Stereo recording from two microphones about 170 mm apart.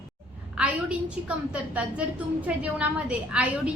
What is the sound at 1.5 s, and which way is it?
A woman's voice, 5° right (ahead or behind).